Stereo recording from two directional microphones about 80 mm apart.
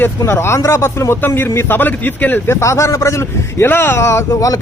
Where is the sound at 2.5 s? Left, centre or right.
Left.